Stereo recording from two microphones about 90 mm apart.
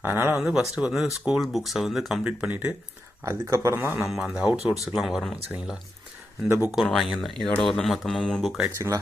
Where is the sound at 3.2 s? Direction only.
35° right (ahead or behind).